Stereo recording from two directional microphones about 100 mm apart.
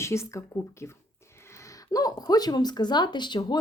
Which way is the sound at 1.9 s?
40° left (ahead or behind).